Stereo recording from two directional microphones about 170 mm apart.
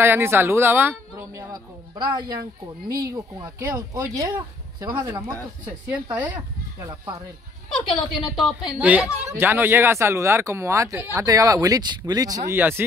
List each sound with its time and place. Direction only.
0.0 s speech: 15° right (ahead or behind)
5.7 s speech: 10° right (ahead or behind)
6.9 s speech: 25° right (ahead or behind)
7.7 s a woman's voice: centre (ahead or behind)